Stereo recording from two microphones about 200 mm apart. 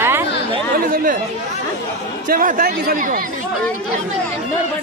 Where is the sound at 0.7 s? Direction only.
45° right (ahead or behind).